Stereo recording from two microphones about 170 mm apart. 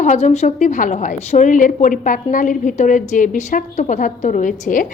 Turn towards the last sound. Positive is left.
turn(degrees=50)  # may be behind; listen again after turning